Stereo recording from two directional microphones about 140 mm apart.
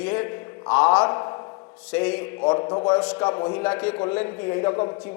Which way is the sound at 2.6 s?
25° left (ahead or behind).